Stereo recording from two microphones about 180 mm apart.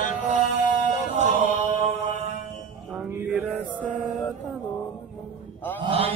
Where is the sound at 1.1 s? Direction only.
40° right (ahead or behind).